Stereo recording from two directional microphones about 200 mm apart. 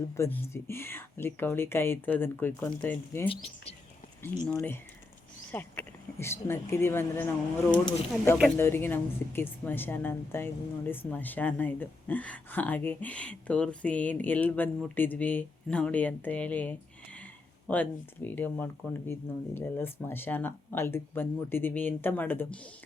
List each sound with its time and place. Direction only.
0.2 s speech: 10° left (ahead or behind)
3.2 s speech: 30° left (ahead or behind)
4.5 s speech: 10° left (ahead or behind)